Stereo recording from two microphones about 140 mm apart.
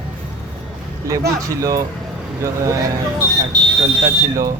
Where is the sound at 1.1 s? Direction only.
20° right (ahead or behind).